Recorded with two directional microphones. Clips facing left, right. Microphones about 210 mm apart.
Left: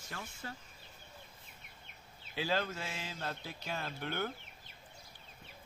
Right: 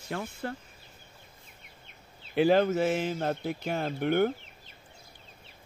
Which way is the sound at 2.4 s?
55° right (ahead or behind).